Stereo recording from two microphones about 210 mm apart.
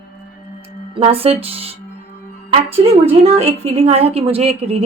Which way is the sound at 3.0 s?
30° right (ahead or behind).